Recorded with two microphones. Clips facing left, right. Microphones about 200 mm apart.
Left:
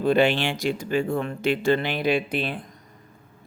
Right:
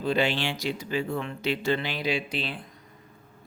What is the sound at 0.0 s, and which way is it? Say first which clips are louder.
Speech: left 6 dB; 55° left (ahead or behind).